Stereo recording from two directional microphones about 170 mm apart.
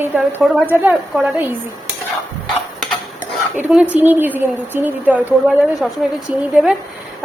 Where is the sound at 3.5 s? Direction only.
10° right (ahead or behind).